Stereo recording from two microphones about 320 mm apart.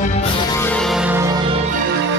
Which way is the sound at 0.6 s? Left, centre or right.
Centre.